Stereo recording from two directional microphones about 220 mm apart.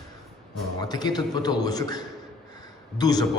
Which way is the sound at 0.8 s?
20° left (ahead or behind).